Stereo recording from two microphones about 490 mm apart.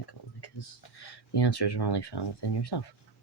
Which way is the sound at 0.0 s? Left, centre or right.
Left.